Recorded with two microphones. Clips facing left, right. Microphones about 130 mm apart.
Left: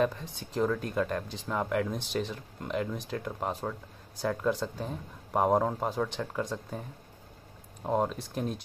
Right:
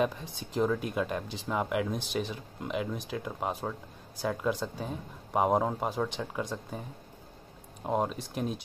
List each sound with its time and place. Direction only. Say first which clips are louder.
0.0 s speech: left 1 dB; 10° right (ahead or behind)
7.8 s speech: left 1 dB; 5° right (ahead or behind)